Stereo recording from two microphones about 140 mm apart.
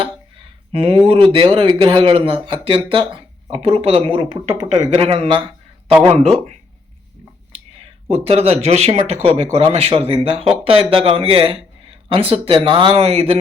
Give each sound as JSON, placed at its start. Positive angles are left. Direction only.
{"t": 0.7, "sound": "a man's voice", "side_deg": -40}
{"t": 8.1, "sound": "a man's voice", "side_deg": -45}